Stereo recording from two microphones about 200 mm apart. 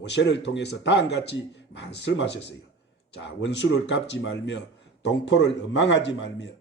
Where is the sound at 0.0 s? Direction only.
60° left (ahead or behind).